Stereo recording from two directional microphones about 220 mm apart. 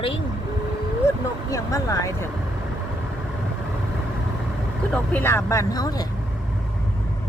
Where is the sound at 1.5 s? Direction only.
15° left (ahead or behind).